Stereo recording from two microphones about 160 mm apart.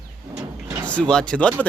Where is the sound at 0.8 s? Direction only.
5° left (ahead or behind).